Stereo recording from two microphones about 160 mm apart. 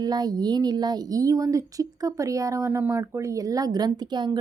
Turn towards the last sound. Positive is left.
turn(degrees=-25)  # may be behind; listen again after turning